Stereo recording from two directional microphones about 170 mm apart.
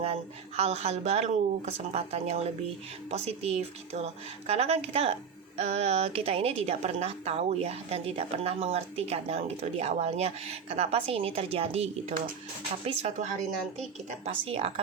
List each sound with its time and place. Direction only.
0.0 s a woman's voice: 40° right (ahead or behind)